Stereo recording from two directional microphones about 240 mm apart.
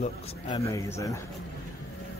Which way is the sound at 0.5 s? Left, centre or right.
Centre.